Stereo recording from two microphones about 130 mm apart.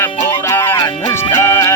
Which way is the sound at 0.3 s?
20° left (ahead or behind).